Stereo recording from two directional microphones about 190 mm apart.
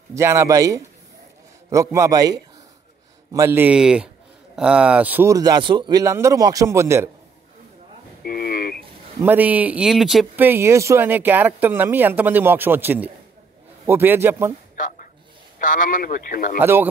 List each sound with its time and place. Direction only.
0.1 s speech: 15° right (ahead or behind)
8.2 s a sound: 50° left (ahead or behind)
9.2 s speech: 10° right (ahead or behind)
15.6 s speech: 45° left (ahead or behind)
16.5 s speech: 10° right (ahead or behind)